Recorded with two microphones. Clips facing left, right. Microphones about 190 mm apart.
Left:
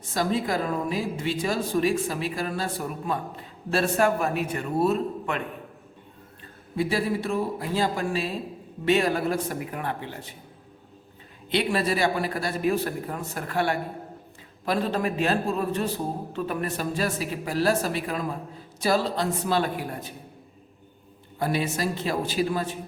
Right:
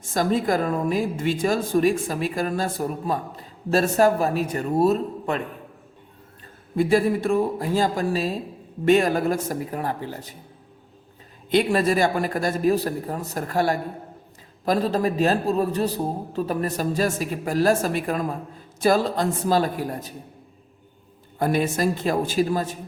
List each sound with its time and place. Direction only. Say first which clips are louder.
0.1 s speech: right 4 dB; 45° right (ahead or behind)
6.7 s speech: right 6 dB; 50° right (ahead or behind)
11.5 s speech: right 5 dB; 45° right (ahead or behind)
21.3 s speech: right 4 dB; 45° right (ahead or behind)